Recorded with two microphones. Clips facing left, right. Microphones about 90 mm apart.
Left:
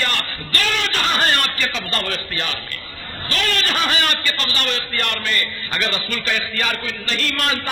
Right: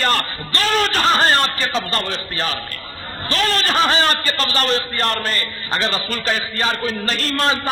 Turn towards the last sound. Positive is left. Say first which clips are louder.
# right 3 dB
turn(degrees=-30)  # may be behind; listen again after turning